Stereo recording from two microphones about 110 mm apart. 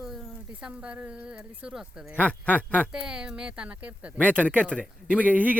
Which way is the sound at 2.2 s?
15° left (ahead or behind).